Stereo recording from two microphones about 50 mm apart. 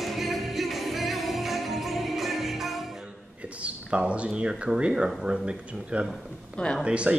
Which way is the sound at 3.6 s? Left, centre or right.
Right.